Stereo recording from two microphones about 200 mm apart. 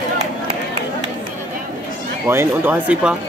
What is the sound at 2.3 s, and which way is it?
Speech, 10° right (ahead or behind).